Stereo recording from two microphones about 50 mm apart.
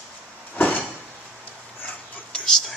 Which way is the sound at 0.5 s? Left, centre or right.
Left.